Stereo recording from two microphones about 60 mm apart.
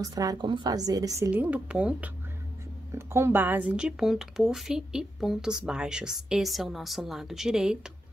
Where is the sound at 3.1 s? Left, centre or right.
Right.